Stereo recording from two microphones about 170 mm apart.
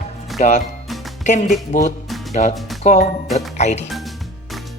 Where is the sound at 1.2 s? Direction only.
45° left (ahead or behind).